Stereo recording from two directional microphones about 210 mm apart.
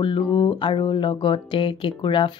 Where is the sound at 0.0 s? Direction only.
25° left (ahead or behind).